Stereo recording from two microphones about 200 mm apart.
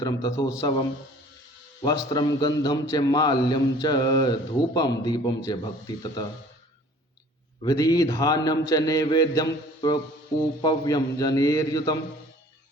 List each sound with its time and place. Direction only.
0.0 s a man's voice: 15° left (ahead or behind)
1.8 s a man's voice: 20° left (ahead or behind)
7.6 s a man's voice: 20° left (ahead or behind)